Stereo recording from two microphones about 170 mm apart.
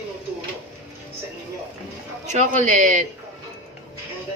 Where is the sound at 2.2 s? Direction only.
45° right (ahead or behind).